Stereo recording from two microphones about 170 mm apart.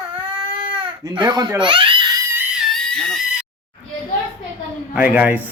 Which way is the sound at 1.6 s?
30° right (ahead or behind).